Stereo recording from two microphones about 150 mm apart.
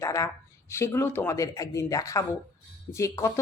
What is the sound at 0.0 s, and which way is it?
Speech, 20° left (ahead or behind).